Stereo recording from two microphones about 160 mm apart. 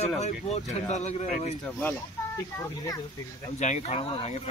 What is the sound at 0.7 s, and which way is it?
Speech, 45° left (ahead or behind).